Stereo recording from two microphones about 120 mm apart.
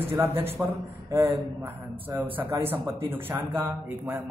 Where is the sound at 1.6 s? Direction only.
15° right (ahead or behind).